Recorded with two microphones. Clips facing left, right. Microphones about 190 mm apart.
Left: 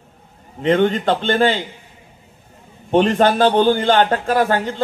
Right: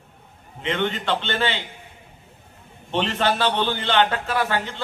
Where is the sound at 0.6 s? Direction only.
40° left (ahead or behind).